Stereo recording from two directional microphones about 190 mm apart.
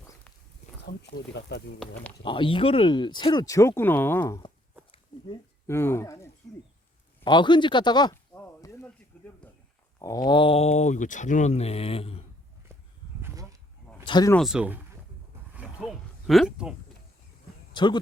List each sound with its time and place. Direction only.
1.3 s speech: 65° left (ahead or behind)
2.2 s speech: 25° left (ahead or behind); by 4.4 s 10° left (ahead or behind)
5.6 s speech: 15° left (ahead or behind)
8.1 s a sound: 10° left (ahead or behind)
10.0 s speech: 20° left (ahead or behind)
13.2 s a sound: 15° right (ahead or behind)
14.0 s speech: 25° left (ahead or behind)
14.3 s speech: centre (ahead or behind)
15.5 s a sound: 5° right (ahead or behind)
17.7 s speech: 25° left (ahead or behind)